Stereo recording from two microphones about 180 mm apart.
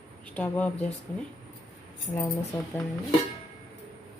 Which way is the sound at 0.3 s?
10° left (ahead or behind).